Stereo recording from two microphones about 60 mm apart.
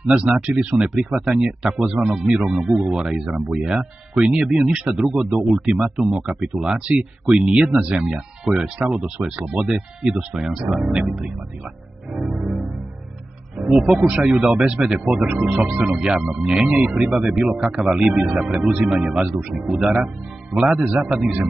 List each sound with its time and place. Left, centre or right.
0.7 s speech: centre
7.2 s speech: centre
12.2 s music: centre
13.6 s a man's voice: centre
15.2 s speech: right
16.5 s speech: centre